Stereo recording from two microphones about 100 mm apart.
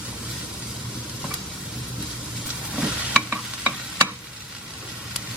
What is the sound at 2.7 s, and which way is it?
Stir, 10° right (ahead or behind).